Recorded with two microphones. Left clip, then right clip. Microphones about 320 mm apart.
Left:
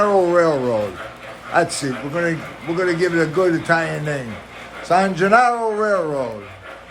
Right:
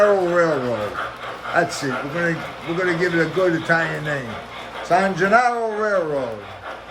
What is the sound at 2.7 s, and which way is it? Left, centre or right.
A man's voice, centre.